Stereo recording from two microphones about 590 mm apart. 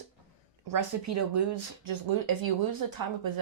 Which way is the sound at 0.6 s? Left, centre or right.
Right.